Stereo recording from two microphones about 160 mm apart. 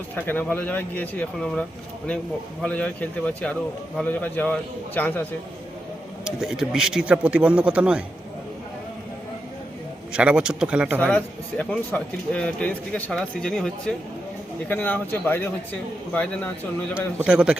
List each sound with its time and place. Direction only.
0.2 s speech: 10° left (ahead or behind)
2.6 s speech: 10° left (ahead or behind)
6.2 s a man's voice: 5° right (ahead or behind)
10.1 s a man's voice: 5° right (ahead or behind)
11.0 s speech: 10° left (ahead or behind)
17.2 s a man's voice: 5° right (ahead or behind)